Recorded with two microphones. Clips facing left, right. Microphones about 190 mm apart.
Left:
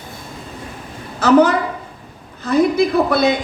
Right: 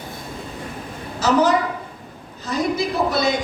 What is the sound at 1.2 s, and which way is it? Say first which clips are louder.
A woman's voice: left 5 dB; 60° left (ahead or behind).